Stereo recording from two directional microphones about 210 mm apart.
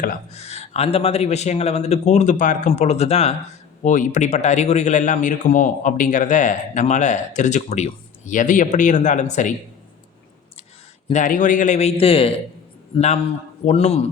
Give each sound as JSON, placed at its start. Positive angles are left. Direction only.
{"t": 0.0, "sound": "a man's voice", "side_deg": 35}
{"t": 11.1, "sound": "a man's voice", "side_deg": 35}
{"t": 13.7, "sound": "a man's voice", "side_deg": 30}